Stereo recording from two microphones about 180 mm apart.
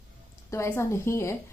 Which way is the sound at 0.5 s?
15° left (ahead or behind).